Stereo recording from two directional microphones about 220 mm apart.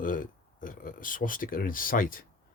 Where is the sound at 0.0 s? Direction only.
40° left (ahead or behind).